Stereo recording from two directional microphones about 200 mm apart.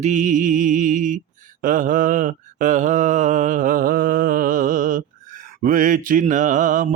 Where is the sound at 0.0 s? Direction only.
40° right (ahead or behind).